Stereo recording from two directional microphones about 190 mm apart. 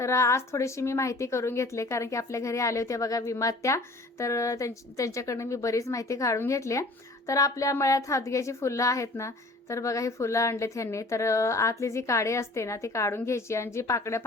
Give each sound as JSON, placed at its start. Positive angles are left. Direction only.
{"t": 0.0, "sound": "a woman's voice", "side_deg": 15}